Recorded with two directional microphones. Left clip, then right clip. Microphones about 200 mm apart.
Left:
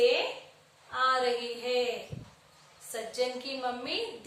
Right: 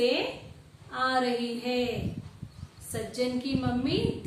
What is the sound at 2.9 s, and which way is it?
A woman's voice, 5° left (ahead or behind).